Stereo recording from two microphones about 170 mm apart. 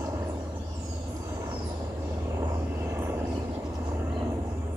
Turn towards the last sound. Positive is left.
turn(degrees=-15)  # may be behind; listen again after turning